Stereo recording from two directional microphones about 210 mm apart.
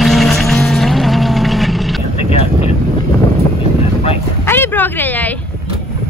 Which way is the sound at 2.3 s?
30° left (ahead or behind).